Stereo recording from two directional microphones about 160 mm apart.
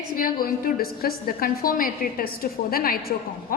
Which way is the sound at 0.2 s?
65° left (ahead or behind).